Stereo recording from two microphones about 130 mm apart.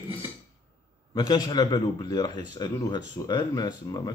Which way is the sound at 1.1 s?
30° left (ahead or behind).